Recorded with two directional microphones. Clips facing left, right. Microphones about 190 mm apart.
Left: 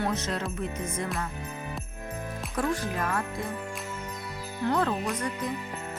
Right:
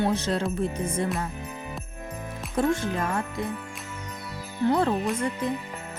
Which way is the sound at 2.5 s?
25° right (ahead or behind).